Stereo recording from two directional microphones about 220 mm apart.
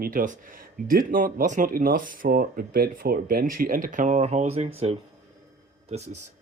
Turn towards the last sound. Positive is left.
turn(degrees=-30)  # may be behind; listen again after turning